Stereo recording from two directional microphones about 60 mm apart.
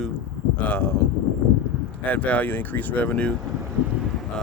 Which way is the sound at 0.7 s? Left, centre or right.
Left.